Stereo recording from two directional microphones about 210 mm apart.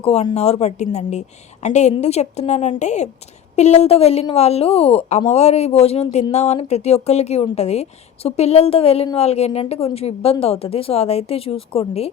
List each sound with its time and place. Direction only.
0.0 s a woman's voice: 30° left (ahead or behind)